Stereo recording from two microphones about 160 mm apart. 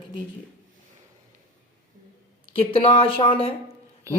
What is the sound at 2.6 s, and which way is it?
Speech, 35° left (ahead or behind).